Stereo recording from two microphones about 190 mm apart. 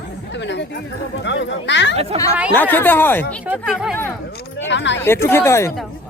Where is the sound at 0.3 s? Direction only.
65° left (ahead or behind).